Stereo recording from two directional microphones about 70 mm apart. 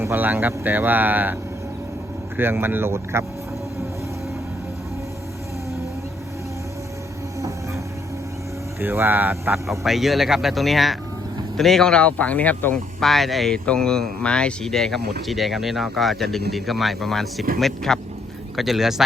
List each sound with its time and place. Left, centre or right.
0.0 s speech: right
7.3 s a sound: right
8.8 s speech: right
9.6 s speech: centre; by 12.7 s left
12.7 s speech: centre